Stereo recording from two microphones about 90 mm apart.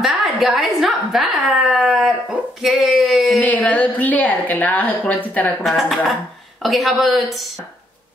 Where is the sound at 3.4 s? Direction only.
15° left (ahead or behind).